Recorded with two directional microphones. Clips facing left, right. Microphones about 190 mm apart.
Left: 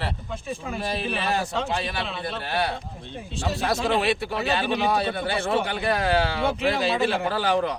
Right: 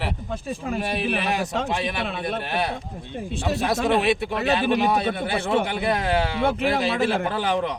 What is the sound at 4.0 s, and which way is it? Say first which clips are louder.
A man's voice: right 2 dB; 20° right (ahead or behind).